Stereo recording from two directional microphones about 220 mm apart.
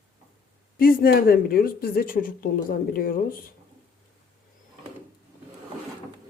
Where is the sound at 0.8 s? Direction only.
40° left (ahead or behind).